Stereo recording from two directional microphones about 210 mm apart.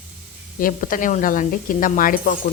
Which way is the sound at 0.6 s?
40° left (ahead or behind).